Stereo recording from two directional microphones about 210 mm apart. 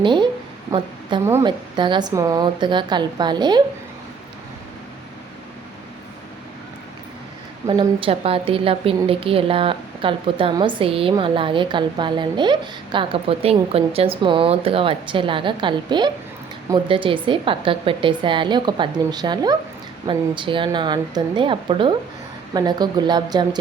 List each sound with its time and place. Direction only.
0.0 s a woman's voice: 20° right (ahead or behind)
7.7 s a woman's voice: 25° right (ahead or behind)